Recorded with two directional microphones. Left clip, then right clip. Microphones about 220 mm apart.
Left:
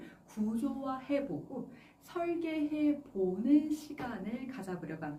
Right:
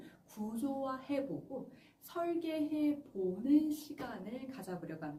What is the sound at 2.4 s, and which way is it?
Speech, 5° right (ahead or behind).